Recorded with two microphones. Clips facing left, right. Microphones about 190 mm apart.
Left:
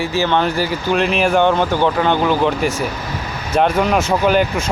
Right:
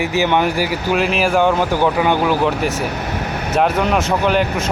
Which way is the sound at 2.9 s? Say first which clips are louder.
Right 3 dB; 65° right (ahead or behind).